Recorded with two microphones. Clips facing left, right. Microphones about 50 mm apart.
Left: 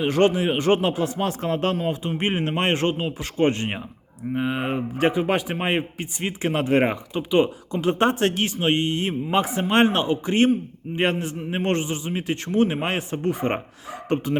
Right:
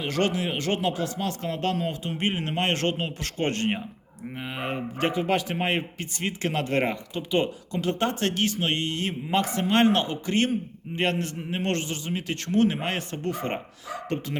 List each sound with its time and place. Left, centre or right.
0.0 s speech: left
1.7 s speech: centre